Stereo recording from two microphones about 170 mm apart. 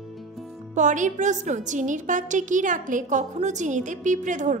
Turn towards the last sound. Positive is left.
turn(degrees=-45)  # may be behind; listen again after turning